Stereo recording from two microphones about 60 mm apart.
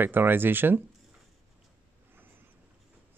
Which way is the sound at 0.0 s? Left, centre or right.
Right.